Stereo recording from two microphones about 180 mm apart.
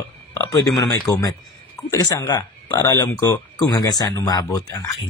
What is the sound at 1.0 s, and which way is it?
Speech, 20° left (ahead or behind).